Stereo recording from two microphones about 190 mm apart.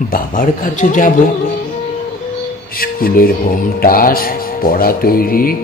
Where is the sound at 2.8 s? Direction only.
50° left (ahead or behind).